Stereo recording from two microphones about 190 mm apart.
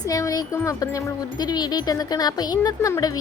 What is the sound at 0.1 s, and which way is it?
Speech, 20° left (ahead or behind).